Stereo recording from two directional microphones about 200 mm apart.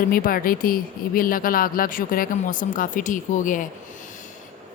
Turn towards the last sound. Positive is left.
turn(degrees=40)  # may be behind; listen again after turning